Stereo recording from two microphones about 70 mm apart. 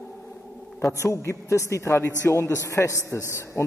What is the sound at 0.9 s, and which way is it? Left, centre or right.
A man's voice, left.